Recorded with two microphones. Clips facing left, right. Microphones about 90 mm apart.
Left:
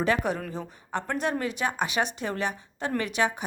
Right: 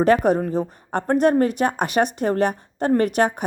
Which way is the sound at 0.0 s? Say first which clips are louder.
Right 9 dB; 45° right (ahead or behind).